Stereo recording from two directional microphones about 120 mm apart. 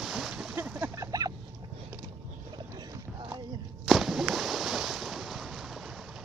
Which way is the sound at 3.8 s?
Centre (ahead or behind).